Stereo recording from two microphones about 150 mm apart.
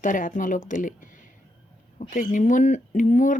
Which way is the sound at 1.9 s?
60° left (ahead or behind).